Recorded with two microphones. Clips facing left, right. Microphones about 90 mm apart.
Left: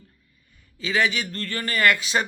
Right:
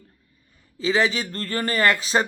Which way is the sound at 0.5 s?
30° right (ahead or behind).